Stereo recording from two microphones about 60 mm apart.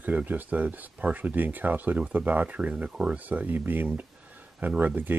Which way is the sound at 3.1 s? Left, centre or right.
Right.